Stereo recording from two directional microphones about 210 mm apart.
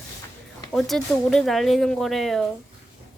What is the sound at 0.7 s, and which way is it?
Speech, centre (ahead or behind).